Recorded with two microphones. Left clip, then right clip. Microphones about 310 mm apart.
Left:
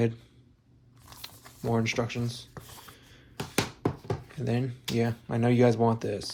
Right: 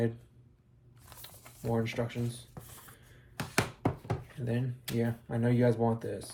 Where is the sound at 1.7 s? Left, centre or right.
Left.